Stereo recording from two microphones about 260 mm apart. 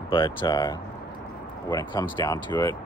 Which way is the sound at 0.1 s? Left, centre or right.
Centre.